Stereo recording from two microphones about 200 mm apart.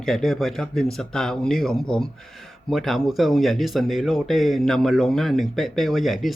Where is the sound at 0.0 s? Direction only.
Centre (ahead or behind).